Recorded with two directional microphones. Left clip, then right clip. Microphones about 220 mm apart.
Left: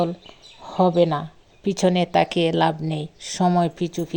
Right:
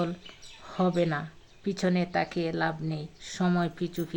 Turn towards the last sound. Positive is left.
turn(degrees=25)  # may be behind; listen again after turning